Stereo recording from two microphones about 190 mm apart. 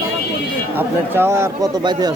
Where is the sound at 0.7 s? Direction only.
10° right (ahead or behind).